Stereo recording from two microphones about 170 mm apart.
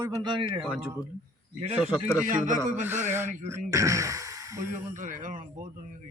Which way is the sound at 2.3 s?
50° right (ahead or behind).